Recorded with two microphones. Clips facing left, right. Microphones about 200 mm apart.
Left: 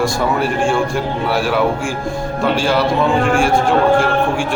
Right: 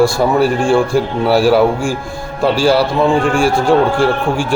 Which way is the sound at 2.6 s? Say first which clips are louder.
Right 7 dB; 35° right (ahead or behind).